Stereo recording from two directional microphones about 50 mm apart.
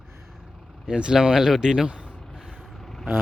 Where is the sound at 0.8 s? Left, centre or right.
Centre.